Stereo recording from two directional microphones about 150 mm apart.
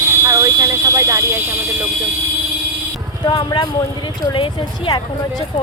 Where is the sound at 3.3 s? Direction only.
30° left (ahead or behind).